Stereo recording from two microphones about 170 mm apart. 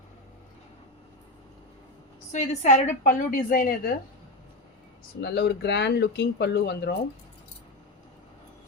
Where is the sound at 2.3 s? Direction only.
45° left (ahead or behind).